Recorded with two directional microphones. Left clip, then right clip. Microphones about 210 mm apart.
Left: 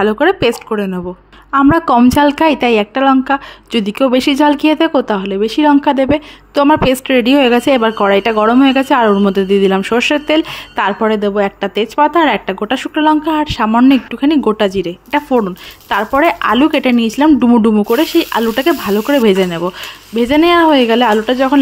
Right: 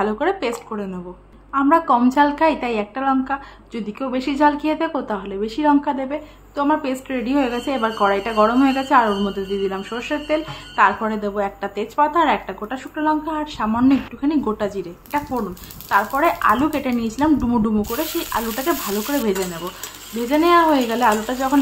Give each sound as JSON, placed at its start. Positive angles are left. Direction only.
{"t": 0.0, "sound": "a woman's voice", "side_deg": 35}